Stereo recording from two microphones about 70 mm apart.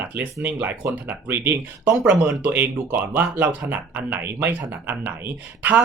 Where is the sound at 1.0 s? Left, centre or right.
Right.